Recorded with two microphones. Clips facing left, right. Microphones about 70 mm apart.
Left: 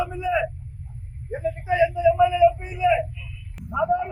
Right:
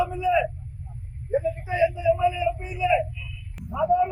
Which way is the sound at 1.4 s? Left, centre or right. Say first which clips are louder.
Left 4 dB; left.